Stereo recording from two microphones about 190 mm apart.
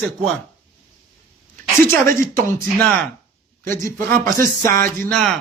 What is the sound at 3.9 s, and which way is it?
Speech, 45° right (ahead or behind).